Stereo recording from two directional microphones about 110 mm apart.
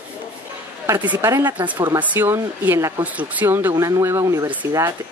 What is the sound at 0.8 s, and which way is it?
Speech, 20° right (ahead or behind).